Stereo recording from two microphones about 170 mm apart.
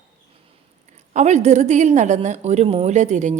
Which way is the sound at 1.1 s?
40° right (ahead or behind).